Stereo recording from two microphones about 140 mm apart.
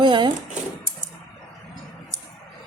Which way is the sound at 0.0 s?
35° right (ahead or behind).